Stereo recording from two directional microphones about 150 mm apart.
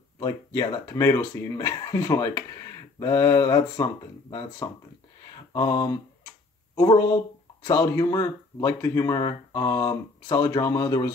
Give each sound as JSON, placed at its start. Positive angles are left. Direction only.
{"t": 0.2, "sound": "speech", "side_deg": 20}